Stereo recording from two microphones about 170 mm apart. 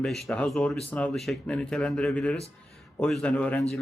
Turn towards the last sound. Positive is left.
turn(degrees=5)  # may be behind; listen again after turning